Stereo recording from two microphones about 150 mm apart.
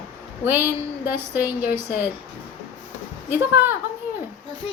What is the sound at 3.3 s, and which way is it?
Speech, 15° right (ahead or behind).